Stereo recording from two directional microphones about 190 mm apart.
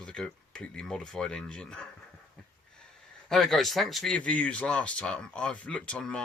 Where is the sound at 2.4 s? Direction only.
Centre (ahead or behind).